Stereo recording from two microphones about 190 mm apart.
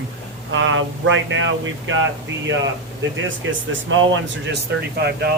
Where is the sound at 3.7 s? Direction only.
85° right.